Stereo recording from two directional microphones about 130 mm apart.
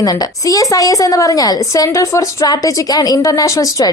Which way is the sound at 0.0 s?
30° left (ahead or behind).